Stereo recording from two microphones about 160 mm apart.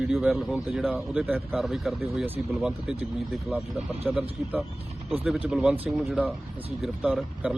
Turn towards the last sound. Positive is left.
turn(degrees=-5)  # may be behind; listen again after turning